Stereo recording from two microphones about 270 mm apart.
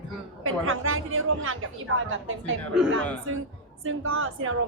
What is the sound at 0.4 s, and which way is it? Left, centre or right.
A woman's voice, right.